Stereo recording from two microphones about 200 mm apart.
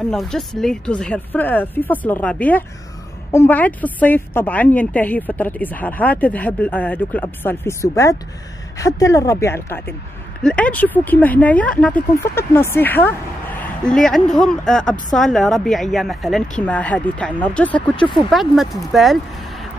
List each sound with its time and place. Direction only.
0.1 s a woman's voice: centre (ahead or behind)
17.9 s speech: 25° left (ahead or behind)
18.3 s speech: centre (ahead or behind)